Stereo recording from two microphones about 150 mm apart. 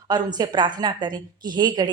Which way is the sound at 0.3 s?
30° right (ahead or behind).